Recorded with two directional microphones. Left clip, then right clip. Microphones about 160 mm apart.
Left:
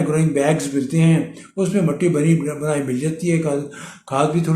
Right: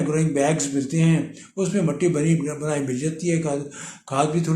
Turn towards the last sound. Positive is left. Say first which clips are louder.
# left 3 dB
turn(degrees=-10)  # may be behind; listen again after turning